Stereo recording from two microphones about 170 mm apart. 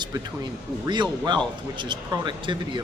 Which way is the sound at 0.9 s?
25° right (ahead or behind).